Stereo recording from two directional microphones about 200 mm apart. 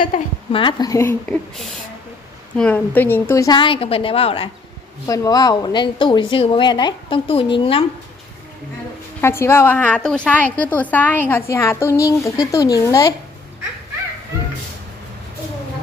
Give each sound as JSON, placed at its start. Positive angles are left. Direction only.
{"t": 0.5, "sound": "speech", "side_deg": 25}
{"t": 2.6, "sound": "speech", "side_deg": 10}
{"t": 5.0, "sound": "speech", "side_deg": 15}
{"t": 9.2, "sound": "a woman's voice", "side_deg": 10}